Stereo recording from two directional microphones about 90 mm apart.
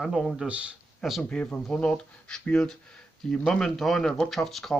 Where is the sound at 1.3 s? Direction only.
10° left (ahead or behind).